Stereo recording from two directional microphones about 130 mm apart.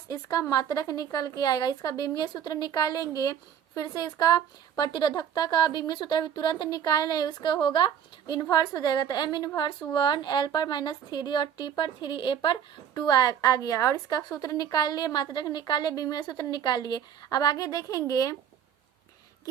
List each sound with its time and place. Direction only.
0.1 s a woman's voice: 25° left (ahead or behind)